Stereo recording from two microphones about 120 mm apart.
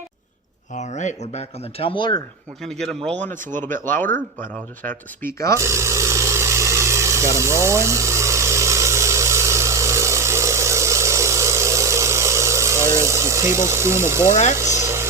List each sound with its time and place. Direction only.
0.7 s speech: 80° left
1.9 s speech: 40° left (ahead or behind)
2.6 s speech: 5° left (ahead or behind)
3.6 s speech: 20° left (ahead or behind)
5.5 s vehicle: 25° right (ahead or behind)
14.5 s speech: 25° right (ahead or behind)